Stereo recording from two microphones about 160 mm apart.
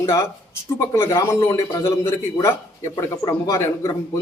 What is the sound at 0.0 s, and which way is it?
A man's voice, 15° left (ahead or behind).